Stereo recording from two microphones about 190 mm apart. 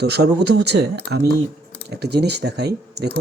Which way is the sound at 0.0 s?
60° right (ahead or behind).